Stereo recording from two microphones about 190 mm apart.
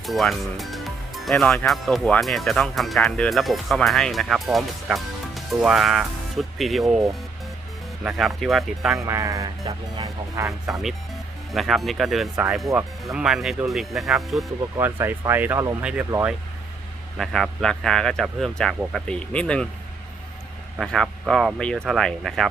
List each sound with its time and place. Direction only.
0.0 s speech: centre (ahead or behind)
9.0 s speech: 15° right (ahead or behind)
10.7 s speech: centre (ahead or behind)
14.8 s speech: 10° right (ahead or behind); by 19.6 s 5° left (ahead or behind)
20.7 s speech: centre (ahead or behind)